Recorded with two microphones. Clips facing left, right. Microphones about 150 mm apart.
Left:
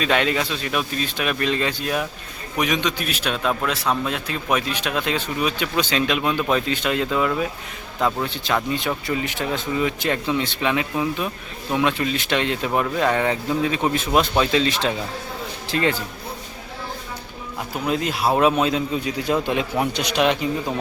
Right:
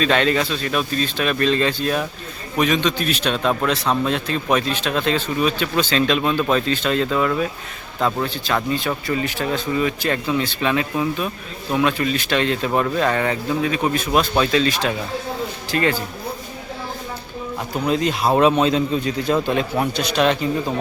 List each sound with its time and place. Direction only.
0.0 s speech: 10° left (ahead or behind)
17.8 s speech: 5° left (ahead or behind)